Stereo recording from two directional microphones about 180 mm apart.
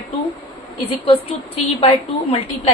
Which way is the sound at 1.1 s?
30° left (ahead or behind).